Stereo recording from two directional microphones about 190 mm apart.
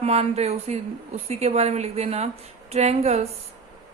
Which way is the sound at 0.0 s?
35° right (ahead or behind).